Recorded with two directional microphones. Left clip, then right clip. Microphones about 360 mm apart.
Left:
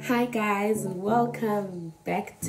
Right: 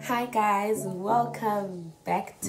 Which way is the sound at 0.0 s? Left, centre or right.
Centre.